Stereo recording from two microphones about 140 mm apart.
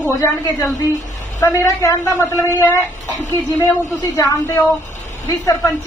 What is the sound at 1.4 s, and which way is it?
A woman's voice, 25° left (ahead or behind).